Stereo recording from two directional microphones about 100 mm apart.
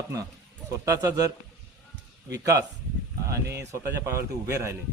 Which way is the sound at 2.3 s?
35° right (ahead or behind).